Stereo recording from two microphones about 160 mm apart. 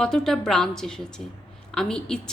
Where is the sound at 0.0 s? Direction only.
5° left (ahead or behind).